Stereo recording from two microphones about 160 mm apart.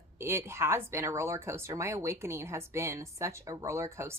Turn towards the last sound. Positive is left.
turn(degrees=-15)  # may be behind; listen again after turning